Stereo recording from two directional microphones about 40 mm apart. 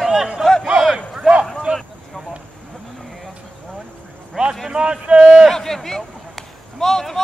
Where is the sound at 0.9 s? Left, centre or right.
Right.